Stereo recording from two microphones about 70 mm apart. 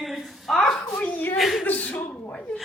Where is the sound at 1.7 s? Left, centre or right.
Left.